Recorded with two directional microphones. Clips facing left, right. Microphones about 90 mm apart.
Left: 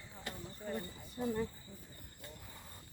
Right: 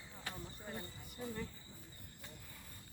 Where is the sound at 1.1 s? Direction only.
30° left (ahead or behind).